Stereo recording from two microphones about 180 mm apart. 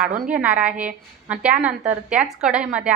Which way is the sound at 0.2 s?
5° right (ahead or behind).